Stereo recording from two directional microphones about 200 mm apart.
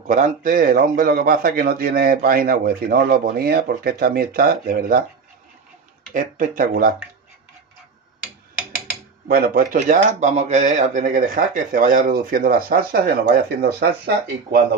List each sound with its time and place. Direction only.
0.0 s speech: 40° right (ahead or behind)
6.1 s speech: 45° right (ahead or behind)
9.3 s speech: 45° right (ahead or behind)